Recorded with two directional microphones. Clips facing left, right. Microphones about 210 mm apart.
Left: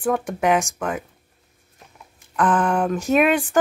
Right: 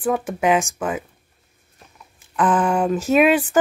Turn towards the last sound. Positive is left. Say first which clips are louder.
# right 2 dB
turn(degrees=-5)  # may be behind; listen again after turning